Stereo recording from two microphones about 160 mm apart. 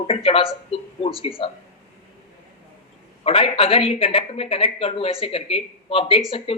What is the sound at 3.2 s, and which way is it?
Speech, 35° left (ahead or behind).